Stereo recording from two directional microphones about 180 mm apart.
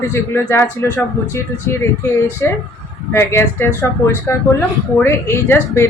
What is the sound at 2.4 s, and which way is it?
Speech, 15° left (ahead or behind).